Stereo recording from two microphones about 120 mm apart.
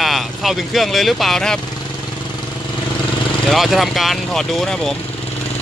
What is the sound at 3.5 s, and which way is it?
Speech, centre (ahead or behind).